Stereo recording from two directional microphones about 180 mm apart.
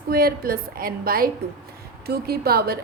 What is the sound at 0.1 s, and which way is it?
A woman's voice, 55° right (ahead or behind).